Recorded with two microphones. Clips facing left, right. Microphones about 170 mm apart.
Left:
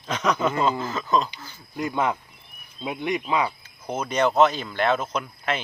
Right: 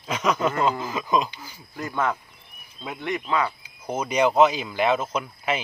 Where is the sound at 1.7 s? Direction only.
15° left (ahead or behind).